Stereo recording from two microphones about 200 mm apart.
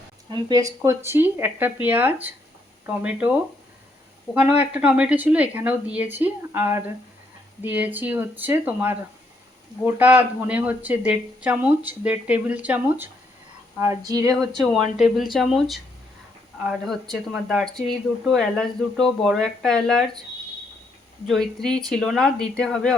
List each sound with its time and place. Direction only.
0.3 s speech: 20° right (ahead or behind)
4.4 s speech: 5° right (ahead or behind)
14.6 s speech: centre (ahead or behind)
21.2 s speech: 5° left (ahead or behind)